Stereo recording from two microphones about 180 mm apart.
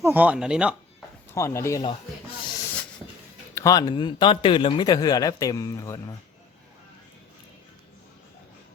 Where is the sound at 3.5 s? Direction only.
20° left (ahead or behind).